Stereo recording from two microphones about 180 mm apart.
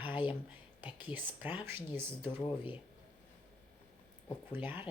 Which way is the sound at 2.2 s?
30° left (ahead or behind).